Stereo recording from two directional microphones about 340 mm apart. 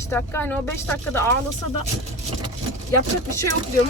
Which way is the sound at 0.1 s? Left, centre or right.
Centre.